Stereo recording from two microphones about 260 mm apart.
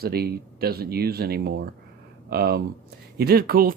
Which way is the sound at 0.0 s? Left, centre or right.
Right.